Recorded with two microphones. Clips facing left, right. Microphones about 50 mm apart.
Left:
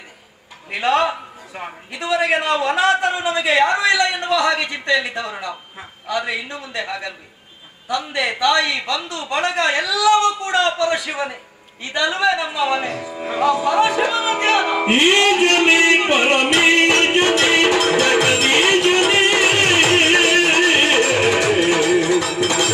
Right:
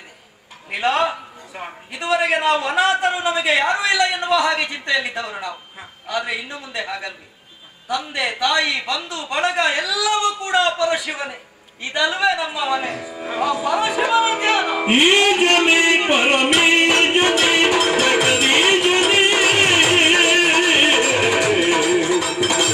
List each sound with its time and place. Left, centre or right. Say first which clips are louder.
0.7 s a man's voice: left 1 dB; centre
8.4 s a man's voice: left 2 dB; centre
13.1 s a man's voice: left 4 dB; centre
14.9 s music: right 1 dB; centre
15.4 s a sound: left 1 dB; centre
16.4 s music: left 1 dB; centre